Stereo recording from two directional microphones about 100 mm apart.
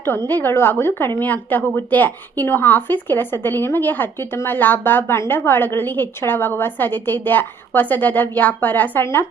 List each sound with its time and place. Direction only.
0.3 s a woman's voice: 20° left (ahead or behind)